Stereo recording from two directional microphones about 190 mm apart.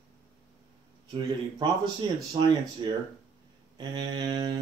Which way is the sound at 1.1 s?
25° right (ahead or behind).